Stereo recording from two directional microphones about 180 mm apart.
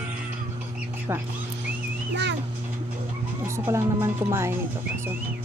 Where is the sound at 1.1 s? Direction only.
15° right (ahead or behind).